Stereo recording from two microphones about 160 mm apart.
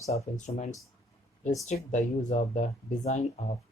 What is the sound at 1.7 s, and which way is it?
Speech, 50° left (ahead or behind).